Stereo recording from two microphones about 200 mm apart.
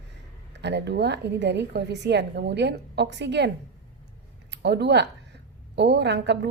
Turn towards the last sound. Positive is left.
turn(degrees=-60)  # may be behind; listen again after turning